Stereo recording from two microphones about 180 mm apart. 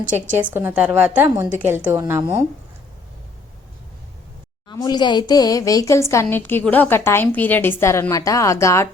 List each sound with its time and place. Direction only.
0.4 s a woman's voice: 10° right (ahead or behind)
4.7 s a woman's voice: 20° left (ahead or behind)